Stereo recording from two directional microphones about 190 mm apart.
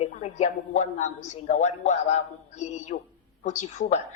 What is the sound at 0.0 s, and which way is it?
A woman's voice, 40° left (ahead or behind).